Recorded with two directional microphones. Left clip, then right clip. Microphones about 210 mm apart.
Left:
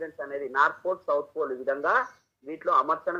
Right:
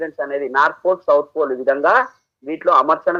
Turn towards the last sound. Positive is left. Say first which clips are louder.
# right 10 dB
turn(degrees=-45)  # may be behind; listen again after turning